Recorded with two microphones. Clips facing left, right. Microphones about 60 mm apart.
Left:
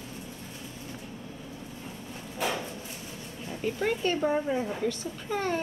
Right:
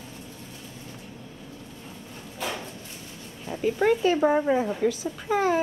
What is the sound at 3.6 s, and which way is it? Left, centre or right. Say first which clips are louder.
A child's voice: right 7 dB; centre.